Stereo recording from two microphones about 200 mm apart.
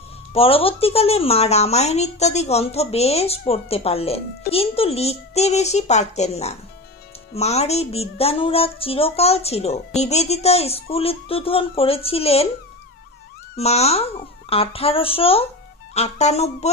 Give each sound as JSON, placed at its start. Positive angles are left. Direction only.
{"t": 0.3, "sound": "speech", "side_deg": 30}
{"t": 13.6, "sound": "a child's voice", "side_deg": 30}